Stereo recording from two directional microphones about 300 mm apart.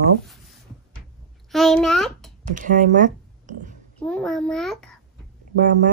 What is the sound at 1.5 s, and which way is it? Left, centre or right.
Speech, centre.